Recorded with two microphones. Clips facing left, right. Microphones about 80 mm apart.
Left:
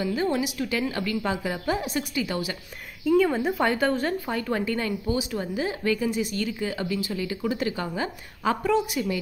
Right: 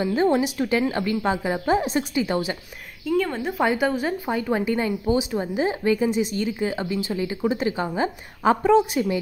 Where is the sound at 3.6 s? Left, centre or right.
Centre; by 9.2 s right.